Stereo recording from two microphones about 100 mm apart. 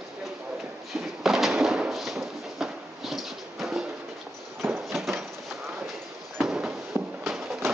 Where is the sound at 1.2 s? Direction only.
5° right (ahead or behind).